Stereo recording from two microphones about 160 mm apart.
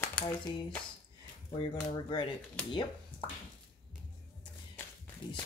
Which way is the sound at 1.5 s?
30° left (ahead or behind).